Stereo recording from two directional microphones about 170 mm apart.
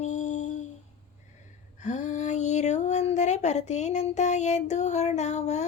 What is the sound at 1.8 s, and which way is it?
Speech, 45° left (ahead or behind).